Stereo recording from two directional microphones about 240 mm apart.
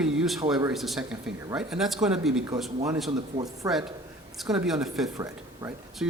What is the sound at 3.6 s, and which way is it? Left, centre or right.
Speech, centre.